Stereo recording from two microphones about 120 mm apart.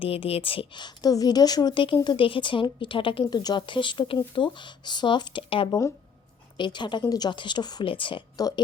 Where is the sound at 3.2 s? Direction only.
35° left (ahead or behind).